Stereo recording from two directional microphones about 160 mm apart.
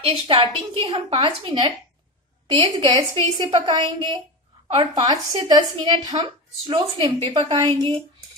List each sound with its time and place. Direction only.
0.0 s a woman's voice: 35° right (ahead or behind)